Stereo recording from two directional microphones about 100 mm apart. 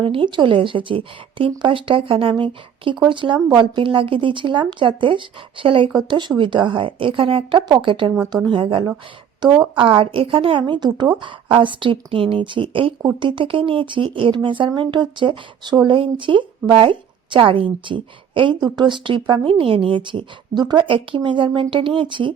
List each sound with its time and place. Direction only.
0.0 s speech: 60° right (ahead or behind)
6.1 s a woman's voice: 50° right (ahead or behind)